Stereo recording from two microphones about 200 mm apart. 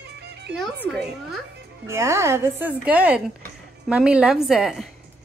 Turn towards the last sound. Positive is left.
turn(degrees=0)  # may be behind; listen again after turning